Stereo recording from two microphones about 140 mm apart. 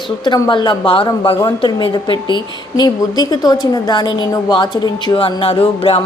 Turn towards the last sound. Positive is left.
turn(degrees=40)  # may be behind; listen again after turning